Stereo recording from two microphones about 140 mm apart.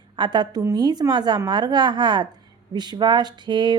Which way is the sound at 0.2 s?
30° right (ahead or behind).